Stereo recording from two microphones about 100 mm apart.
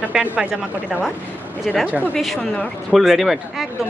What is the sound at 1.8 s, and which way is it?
Speech, 15° right (ahead or behind).